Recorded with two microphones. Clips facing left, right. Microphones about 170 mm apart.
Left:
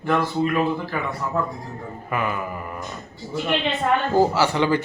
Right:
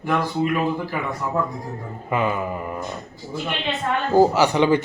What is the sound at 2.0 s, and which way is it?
Speech, 20° right (ahead or behind).